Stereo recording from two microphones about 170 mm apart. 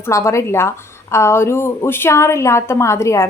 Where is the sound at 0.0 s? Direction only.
15° left (ahead or behind).